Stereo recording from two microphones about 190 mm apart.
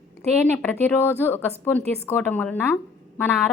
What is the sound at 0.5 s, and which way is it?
A woman's voice, 10° left (ahead or behind).